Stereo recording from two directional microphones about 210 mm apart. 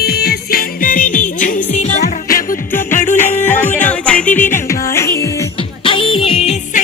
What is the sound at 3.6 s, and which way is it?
Music, 10° left (ahead or behind).